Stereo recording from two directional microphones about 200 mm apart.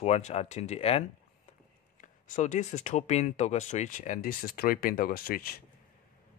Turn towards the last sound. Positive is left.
turn(degrees=50)  # may be behind; listen again after turning